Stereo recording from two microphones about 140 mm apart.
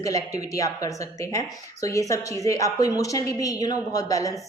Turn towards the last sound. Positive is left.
turn(degrees=25)  # may be behind; listen again after turning